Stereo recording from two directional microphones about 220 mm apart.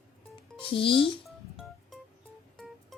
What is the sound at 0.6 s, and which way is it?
Speech, 25° left (ahead or behind).